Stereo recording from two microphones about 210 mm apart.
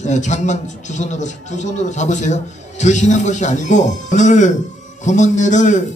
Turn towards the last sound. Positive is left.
turn(degrees=35)  # may be behind; listen again after turning